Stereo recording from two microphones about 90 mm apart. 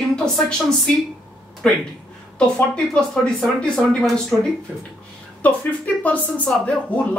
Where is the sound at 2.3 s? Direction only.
10° left (ahead or behind).